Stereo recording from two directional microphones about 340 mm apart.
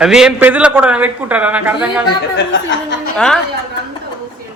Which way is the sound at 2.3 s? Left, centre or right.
Left.